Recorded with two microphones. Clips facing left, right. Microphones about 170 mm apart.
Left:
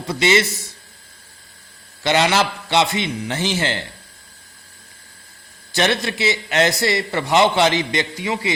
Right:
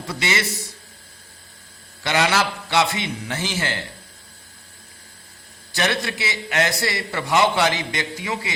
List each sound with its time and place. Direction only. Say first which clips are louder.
0.2 s a man's voice: left 8 dB; 25° left (ahead or behind)
2.0 s a man's voice: left 3 dB; 25° left (ahead or behind)
5.7 s a man's voice: left 4 dB; 25° left (ahead or behind)